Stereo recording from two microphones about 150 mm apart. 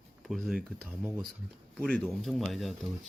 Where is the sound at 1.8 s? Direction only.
5° left (ahead or behind).